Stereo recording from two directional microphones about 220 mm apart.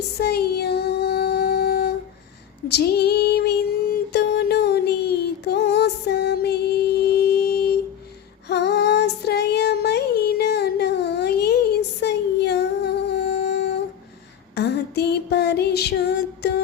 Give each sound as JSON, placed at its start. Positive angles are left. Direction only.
{"t": 0.2, "sound": "child singing", "side_deg": 45}
{"t": 2.6, "sound": "female singing", "side_deg": 50}
{"t": 8.4, "sound": "child singing", "side_deg": 50}
{"t": 14.5, "sound": "music", "side_deg": 50}